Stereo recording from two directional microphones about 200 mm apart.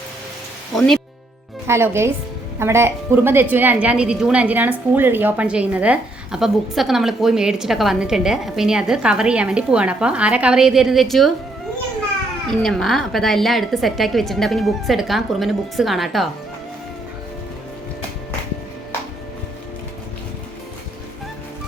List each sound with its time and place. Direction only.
1.6 s a woman's voice: 15° right (ahead or behind)
12.5 s a woman's voice: centre (ahead or behind)